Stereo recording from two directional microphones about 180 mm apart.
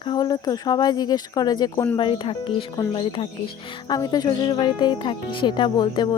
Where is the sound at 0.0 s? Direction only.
25° left (ahead or behind).